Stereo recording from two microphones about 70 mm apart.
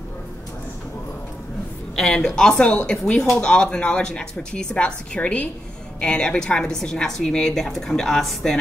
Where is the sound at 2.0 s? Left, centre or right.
Centre.